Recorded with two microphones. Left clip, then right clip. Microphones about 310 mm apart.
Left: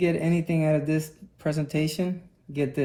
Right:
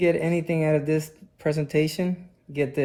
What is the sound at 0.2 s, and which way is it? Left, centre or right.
Speech, right.